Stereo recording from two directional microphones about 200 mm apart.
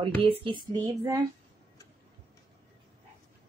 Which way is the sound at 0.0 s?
25° right (ahead or behind).